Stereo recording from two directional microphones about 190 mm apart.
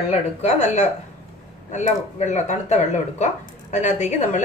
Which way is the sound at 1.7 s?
40° left (ahead or behind).